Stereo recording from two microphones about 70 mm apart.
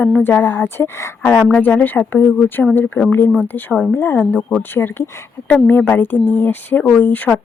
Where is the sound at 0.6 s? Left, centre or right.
Left.